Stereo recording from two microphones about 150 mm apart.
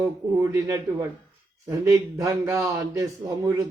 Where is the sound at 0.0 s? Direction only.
15° right (ahead or behind).